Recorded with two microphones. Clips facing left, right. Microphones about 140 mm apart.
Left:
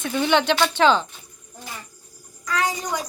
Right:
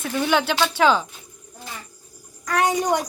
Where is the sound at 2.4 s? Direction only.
60° right (ahead or behind).